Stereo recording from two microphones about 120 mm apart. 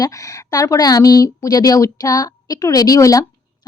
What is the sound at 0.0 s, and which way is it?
Speech, 30° left (ahead or behind).